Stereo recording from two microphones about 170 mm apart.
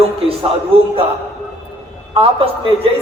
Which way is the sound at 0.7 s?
35° right (ahead or behind).